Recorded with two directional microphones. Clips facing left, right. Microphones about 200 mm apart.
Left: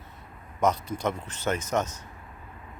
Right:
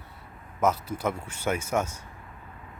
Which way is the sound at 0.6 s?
5° right (ahead or behind).